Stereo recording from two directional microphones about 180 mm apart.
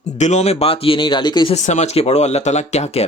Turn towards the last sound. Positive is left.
turn(degrees=35)  # may be behind; listen again after turning